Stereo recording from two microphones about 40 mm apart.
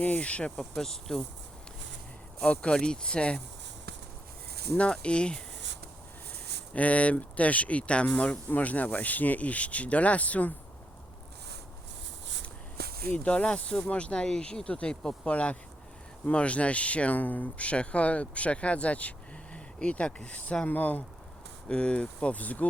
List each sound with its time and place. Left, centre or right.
0.0 s speech: left
0.8 s speech: centre
2.4 s speech: left
4.8 s speech: left
6.7 s speech: left
13.1 s speech: left
17.2 s speech: left
17.6 s speech: left
20.7 s speech: left
21.7 s speech: left